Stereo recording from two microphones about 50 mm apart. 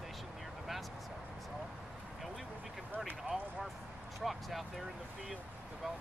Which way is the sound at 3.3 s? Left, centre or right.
Right.